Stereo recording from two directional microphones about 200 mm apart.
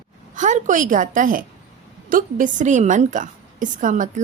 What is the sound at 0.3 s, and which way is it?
A woman's voice, 35° right (ahead or behind).